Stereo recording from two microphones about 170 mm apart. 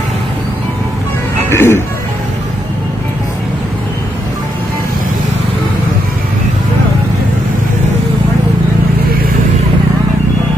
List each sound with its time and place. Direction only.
1.5 s speech: 15° left (ahead or behind)